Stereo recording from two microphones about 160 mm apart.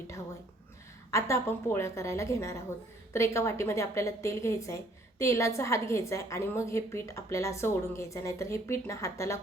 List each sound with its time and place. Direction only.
1.1 s a woman's voice: 15° left (ahead or behind)